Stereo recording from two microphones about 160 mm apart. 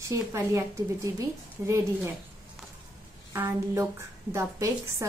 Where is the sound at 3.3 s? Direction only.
15° right (ahead or behind).